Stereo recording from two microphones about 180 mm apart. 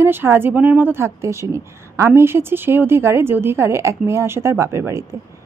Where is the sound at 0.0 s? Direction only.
10° right (ahead or behind).